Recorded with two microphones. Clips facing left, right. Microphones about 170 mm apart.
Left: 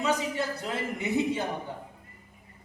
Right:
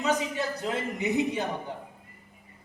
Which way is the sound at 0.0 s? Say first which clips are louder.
Even; 20° right (ahead or behind).